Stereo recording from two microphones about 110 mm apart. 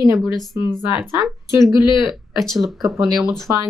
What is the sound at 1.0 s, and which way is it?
Speech, 25° right (ahead or behind).